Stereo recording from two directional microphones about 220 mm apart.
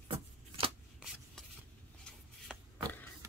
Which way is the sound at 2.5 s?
5° right (ahead or behind).